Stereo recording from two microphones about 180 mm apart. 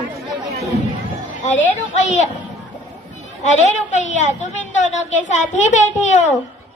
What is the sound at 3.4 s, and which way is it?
A child's voice, 40° left (ahead or behind).